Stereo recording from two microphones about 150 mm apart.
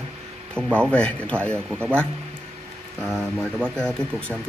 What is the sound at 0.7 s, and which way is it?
Speech, 5° left (ahead or behind).